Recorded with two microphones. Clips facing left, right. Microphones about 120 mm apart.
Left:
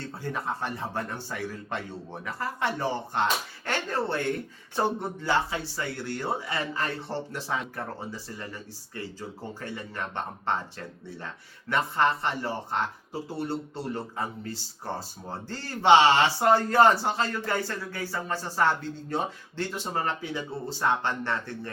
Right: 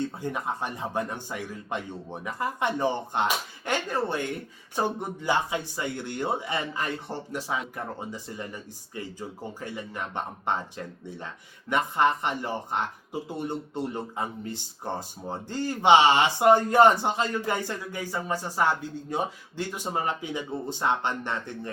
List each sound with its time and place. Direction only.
0.0 s speech: 15° right (ahead or behind)